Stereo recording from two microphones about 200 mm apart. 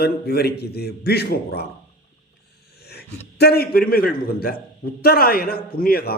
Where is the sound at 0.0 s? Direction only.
50° left (ahead or behind).